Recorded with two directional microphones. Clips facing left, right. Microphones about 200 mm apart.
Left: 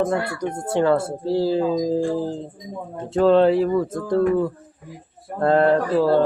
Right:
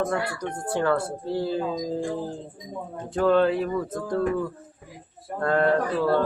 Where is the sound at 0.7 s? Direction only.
25° left (ahead or behind).